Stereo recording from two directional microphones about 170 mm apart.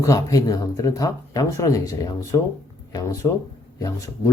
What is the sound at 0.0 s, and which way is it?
Speech, 20° left (ahead or behind).